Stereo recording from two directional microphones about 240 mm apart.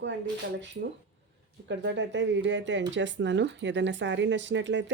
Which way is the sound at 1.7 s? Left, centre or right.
Right.